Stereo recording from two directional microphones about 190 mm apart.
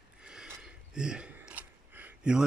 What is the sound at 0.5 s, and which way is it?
Gasp, 5° right (ahead or behind).